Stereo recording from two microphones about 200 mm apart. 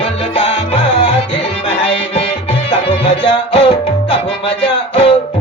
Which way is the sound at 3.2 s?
30° left (ahead or behind).